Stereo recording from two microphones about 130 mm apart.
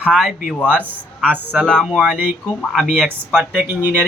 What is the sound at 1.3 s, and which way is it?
Speech, 15° right (ahead or behind).